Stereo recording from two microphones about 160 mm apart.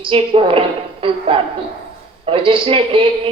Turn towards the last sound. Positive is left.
turn(degrees=-35)  # may be behind; listen again after turning